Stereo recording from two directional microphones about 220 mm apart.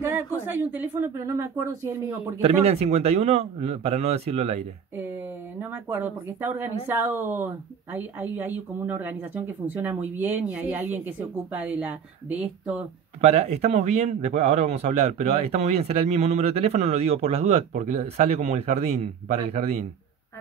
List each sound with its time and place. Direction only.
0.0 s speech: 10° right (ahead or behind)
2.4 s speech: 30° right (ahead or behind)
5.6 s speech: 10° right (ahead or behind)
13.2 s speech: 30° right (ahead or behind)